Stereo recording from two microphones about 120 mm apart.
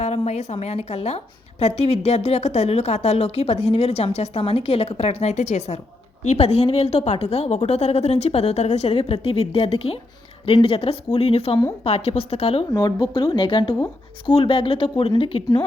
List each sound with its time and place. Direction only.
0.0 s a woman's voice: 65° left (ahead or behind)
9.0 s a woman's voice: 55° left (ahead or behind)
12.7 s speech: 30° left (ahead or behind); by 15.4 s 50° left (ahead or behind)